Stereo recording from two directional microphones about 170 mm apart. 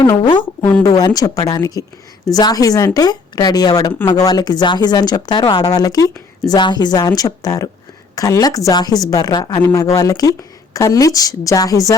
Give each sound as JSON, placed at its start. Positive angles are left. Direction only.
{"t": 0.0, "sound": "speech", "side_deg": 25}